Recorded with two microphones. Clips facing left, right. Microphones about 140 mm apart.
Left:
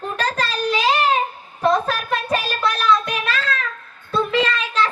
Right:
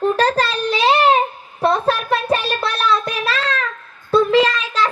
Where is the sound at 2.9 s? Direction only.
35° right (ahead or behind).